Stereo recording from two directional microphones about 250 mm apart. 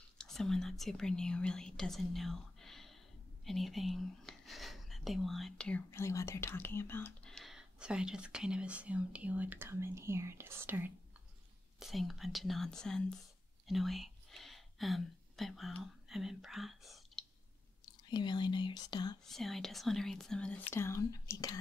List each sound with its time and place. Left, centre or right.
0.2 s speech: centre
17.8 s speech: centre
19.2 s speech: centre